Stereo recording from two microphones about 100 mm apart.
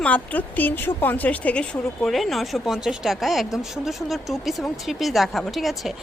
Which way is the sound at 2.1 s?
Centre (ahead or behind).